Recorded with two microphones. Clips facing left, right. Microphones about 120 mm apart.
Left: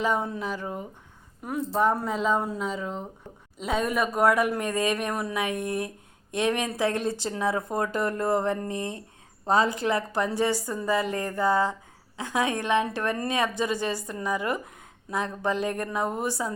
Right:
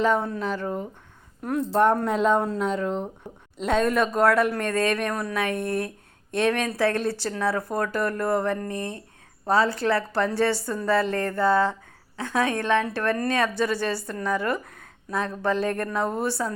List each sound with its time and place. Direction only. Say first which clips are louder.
0.0 s a woman's voice: right 4 dB; 10° left (ahead or behind)